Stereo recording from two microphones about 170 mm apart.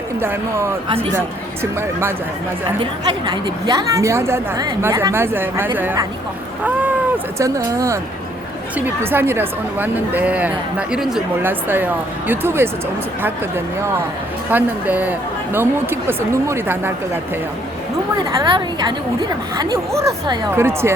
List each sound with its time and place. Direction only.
0.2 s speech: 15° right (ahead or behind)
3.2 s speech: 25° right (ahead or behind)
7.3 s speech: 20° right (ahead or behind)
14.5 s speech: 10° right (ahead or behind)
18.3 s speech: 25° right (ahead or behind)